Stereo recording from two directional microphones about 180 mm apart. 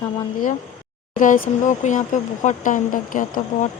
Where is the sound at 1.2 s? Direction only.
45° left (ahead or behind).